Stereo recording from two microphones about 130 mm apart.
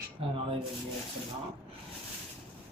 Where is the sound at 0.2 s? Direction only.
45° right (ahead or behind).